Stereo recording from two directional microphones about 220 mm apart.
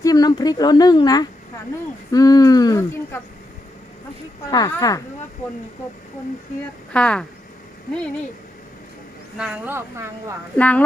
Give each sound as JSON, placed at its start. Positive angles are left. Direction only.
{"t": 0.0, "sound": "speech", "side_deg": 15}
{"t": 4.4, "sound": "speech", "side_deg": 15}
{"t": 6.9, "sound": "speech", "side_deg": 5}
{"t": 9.4, "sound": "speech", "side_deg": -5}
{"t": 10.6, "sound": "speech", "side_deg": 5}